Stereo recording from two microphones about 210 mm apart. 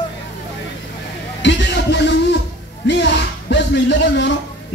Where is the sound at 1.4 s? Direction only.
55° left (ahead or behind).